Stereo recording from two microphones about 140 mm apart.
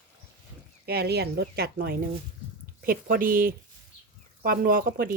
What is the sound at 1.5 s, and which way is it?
Speech, 90° right.